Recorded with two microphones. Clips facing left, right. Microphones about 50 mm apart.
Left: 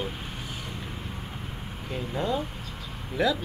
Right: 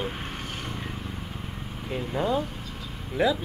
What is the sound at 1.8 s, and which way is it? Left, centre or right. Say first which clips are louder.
Speech: right 2 dB; centre.